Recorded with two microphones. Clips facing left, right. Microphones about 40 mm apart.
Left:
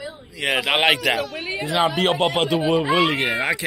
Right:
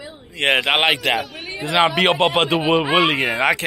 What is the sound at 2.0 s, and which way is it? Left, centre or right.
A man's voice, right.